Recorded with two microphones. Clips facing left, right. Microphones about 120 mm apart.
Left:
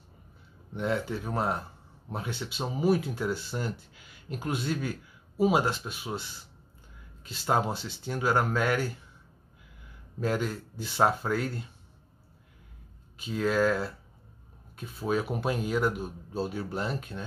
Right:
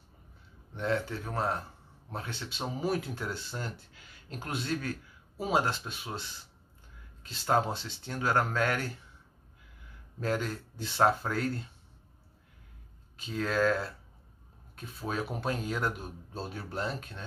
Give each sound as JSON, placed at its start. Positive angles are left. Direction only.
{"t": 0.7, "sound": "speech", "side_deg": 10}
{"t": 7.2, "sound": "speech", "side_deg": 5}
{"t": 10.2, "sound": "speech", "side_deg": 5}
{"t": 13.2, "sound": "speech", "side_deg": 5}